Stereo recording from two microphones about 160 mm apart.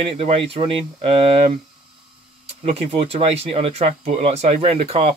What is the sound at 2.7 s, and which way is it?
Speech, 35° right (ahead or behind).